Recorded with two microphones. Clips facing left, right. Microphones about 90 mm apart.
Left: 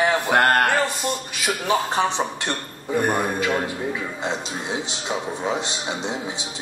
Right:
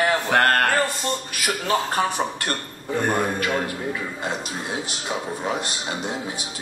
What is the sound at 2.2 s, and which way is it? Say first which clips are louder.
Speech: even; 15° left (ahead or behind).